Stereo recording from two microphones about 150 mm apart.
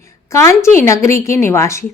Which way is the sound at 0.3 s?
20° left (ahead or behind).